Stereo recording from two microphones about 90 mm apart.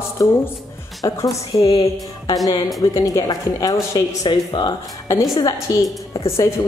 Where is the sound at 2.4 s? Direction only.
45° left (ahead or behind).